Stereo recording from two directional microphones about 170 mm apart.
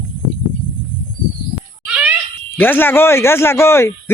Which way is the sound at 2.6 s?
10° left (ahead or behind).